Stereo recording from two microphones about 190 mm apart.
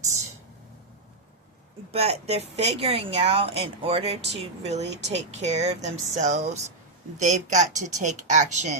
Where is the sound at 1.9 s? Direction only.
30° right (ahead or behind).